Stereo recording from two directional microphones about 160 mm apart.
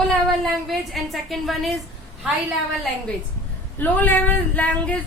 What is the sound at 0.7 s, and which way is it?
Speech, centre (ahead or behind).